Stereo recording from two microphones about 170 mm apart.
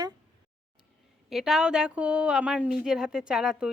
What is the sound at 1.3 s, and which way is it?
Speech, 5° right (ahead or behind).